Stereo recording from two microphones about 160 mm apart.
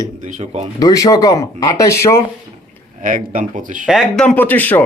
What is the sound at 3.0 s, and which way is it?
Speech, 55° right (ahead or behind).